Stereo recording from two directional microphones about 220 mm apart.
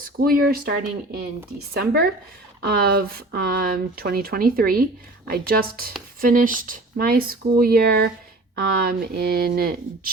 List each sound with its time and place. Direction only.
0.2 s speech: 40° right (ahead or behind)